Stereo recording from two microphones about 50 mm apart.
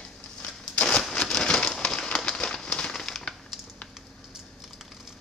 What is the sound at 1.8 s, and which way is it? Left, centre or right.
Bird, centre.